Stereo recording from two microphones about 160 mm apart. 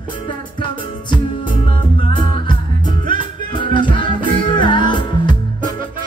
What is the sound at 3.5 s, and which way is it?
Music, 30° left (ahead or behind).